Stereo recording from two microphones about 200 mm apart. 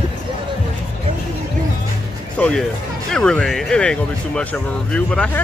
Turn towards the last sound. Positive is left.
turn(degrees=5)  # may be behind; listen again after turning